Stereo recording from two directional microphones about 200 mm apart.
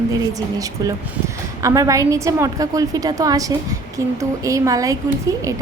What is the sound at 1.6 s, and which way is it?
A woman's voice, 15° right (ahead or behind).